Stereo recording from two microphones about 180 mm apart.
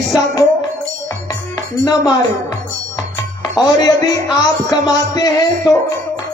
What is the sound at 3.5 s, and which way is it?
Music, 20° left (ahead or behind).